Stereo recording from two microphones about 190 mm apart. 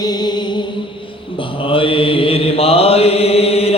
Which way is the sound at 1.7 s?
30° left (ahead or behind).